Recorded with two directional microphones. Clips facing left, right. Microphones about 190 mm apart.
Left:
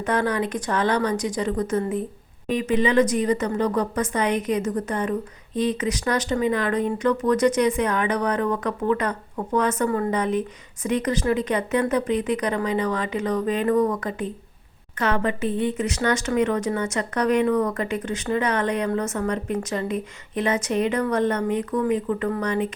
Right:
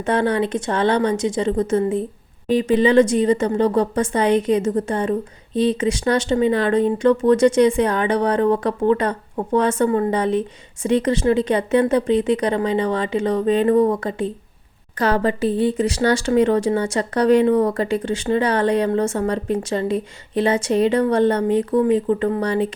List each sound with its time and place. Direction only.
0.0 s speech: 30° right (ahead or behind)